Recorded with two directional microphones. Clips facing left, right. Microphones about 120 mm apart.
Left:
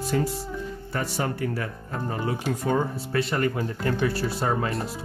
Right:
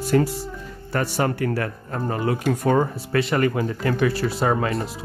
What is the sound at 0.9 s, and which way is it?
Speech, 70° right (ahead or behind).